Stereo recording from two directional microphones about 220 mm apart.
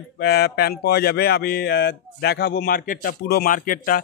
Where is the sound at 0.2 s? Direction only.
45° left (ahead or behind).